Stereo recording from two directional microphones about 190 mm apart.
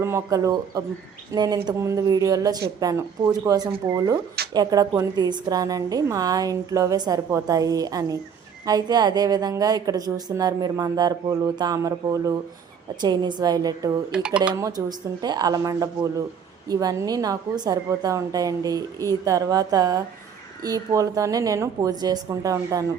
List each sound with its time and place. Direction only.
0.0 s a woman's voice: 15° right (ahead or behind)
14.1 s speech: 5° right (ahead or behind)
14.4 s a woman's voice: 20° right (ahead or behind)